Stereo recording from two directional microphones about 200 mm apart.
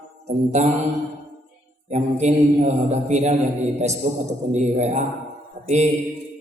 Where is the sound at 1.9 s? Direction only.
35° right (ahead or behind).